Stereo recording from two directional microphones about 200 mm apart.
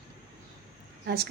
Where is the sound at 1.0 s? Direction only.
50° right (ahead or behind).